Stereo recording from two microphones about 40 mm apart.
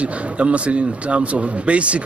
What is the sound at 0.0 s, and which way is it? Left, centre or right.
Speech, right.